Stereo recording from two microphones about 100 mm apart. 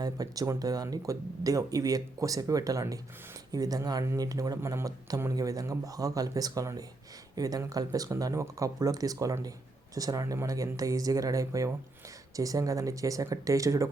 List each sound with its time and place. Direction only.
0.0 s speech: 35° right (ahead or behind)